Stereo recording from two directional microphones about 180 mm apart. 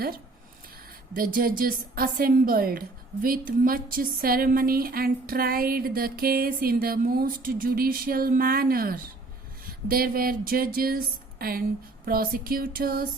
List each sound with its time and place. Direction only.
1.1 s a woman's voice: 50° right (ahead or behind)
12.0 s music: 55° right (ahead or behind)